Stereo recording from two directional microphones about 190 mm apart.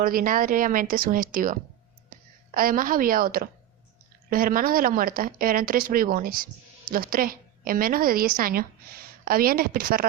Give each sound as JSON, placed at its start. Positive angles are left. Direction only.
{"t": 0.0, "sound": "speech", "side_deg": -50}
{"t": 2.1, "sound": "a sound", "side_deg": -45}
{"t": 2.6, "sound": "speech", "side_deg": -50}